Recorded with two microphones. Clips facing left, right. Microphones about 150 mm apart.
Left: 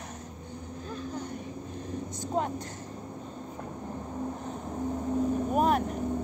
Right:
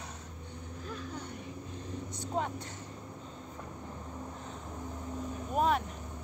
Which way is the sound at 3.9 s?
35° left (ahead or behind).